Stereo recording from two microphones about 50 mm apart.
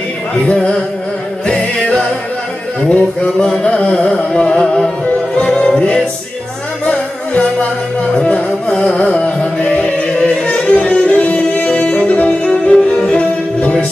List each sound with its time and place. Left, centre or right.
1.5 s music: left
3.4 s carnatic music: centre
4.1 s music: centre
8.1 s music: left
12.4 s music: centre
13.6 s music: left